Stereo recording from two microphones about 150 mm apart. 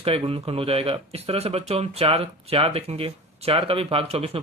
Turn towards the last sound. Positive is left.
turn(degrees=-40)  # may be behind; listen again after turning